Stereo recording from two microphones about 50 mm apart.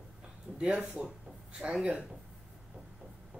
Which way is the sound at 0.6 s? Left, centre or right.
Centre.